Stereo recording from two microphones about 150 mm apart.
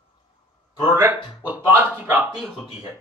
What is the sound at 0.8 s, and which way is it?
Speech, 20° right (ahead or behind).